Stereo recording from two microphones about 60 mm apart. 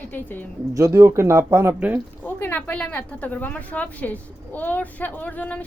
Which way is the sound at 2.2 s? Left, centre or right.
Left.